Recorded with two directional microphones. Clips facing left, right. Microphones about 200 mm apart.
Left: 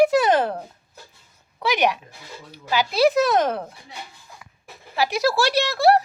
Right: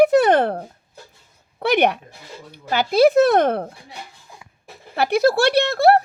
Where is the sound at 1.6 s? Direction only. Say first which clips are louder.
Right 4 dB; 60° right (ahead or behind).